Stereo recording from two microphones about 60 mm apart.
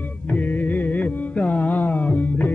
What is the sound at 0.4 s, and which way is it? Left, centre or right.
Music, left.